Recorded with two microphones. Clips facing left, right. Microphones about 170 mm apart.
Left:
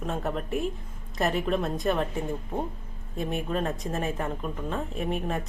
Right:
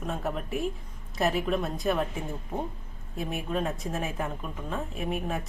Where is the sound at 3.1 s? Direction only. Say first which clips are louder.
Left 2 dB; centre (ahead or behind).